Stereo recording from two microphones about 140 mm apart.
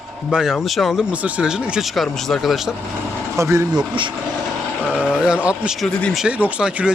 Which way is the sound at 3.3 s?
20° right (ahead or behind).